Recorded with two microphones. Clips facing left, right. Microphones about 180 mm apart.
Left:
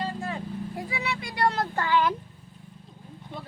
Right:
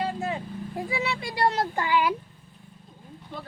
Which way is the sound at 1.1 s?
25° right (ahead or behind).